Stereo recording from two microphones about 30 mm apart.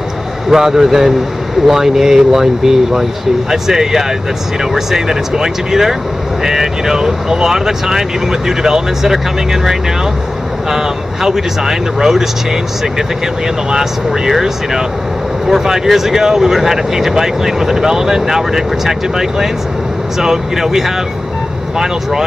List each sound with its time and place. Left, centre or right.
0.5 s speech: centre
13.7 s speech: centre